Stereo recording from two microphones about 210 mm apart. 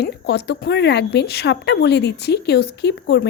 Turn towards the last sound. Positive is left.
turn(degrees=55)  # may be behind; listen again after turning